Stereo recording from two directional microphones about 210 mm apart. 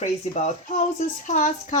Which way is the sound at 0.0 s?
35° left (ahead or behind).